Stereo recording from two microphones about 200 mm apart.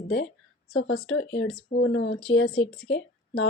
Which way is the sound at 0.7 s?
90° left.